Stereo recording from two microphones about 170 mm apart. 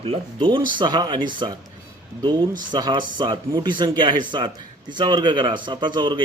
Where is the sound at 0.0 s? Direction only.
30° right (ahead or behind).